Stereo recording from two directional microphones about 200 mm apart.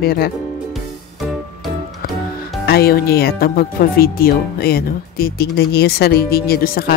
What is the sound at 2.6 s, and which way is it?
Speech, 50° left (ahead or behind).